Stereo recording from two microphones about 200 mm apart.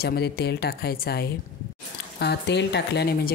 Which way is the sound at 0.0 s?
55° left (ahead or behind).